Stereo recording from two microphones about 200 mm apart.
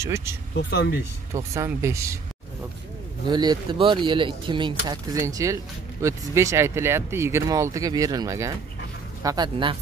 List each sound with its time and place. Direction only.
0.0 s speech: 15° right (ahead or behind)
0.6 s speech: 55° left (ahead or behind)
1.3 s speech: 15° right (ahead or behind)
3.3 s speech: 20° right (ahead or behind)